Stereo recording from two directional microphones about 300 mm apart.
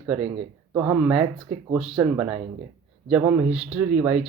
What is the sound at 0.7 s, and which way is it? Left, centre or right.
Speech, centre.